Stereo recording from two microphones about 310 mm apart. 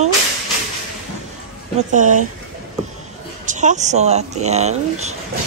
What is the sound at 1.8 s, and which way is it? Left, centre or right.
Speech, right.